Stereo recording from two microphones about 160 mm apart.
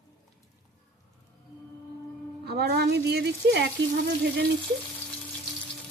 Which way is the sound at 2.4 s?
85° right.